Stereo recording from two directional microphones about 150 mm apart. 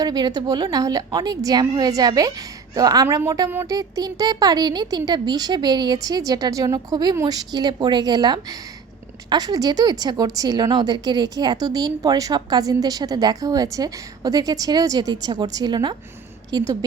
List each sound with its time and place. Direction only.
0.0 s a woman's voice: 25° right (ahead or behind)